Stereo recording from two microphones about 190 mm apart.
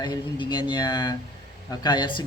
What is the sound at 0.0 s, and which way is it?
Speech, 25° left (ahead or behind).